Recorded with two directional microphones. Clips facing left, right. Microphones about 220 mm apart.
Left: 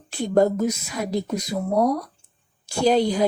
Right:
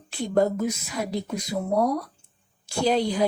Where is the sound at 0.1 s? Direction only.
45° left (ahead or behind).